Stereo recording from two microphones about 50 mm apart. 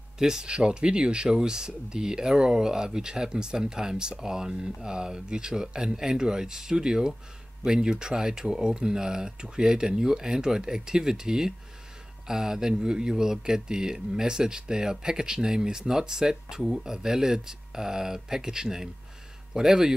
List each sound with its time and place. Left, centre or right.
0.2 s speech: centre